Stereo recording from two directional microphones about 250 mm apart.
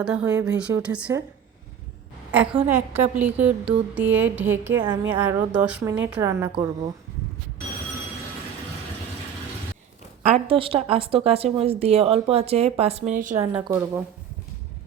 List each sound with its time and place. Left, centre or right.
0.0 s a woman's voice: centre
2.6 s a woman's voice: centre
10.2 s a woman's voice: right
13.6 s a woman's voice: centre